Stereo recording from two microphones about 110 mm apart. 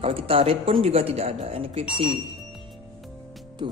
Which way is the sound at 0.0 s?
60° right (ahead or behind).